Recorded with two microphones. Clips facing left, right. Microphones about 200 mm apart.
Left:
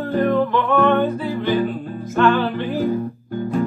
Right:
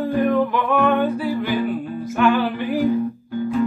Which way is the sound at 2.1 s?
10° right (ahead or behind).